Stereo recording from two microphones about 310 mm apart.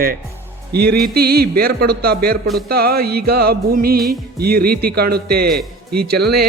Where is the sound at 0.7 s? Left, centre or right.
Right.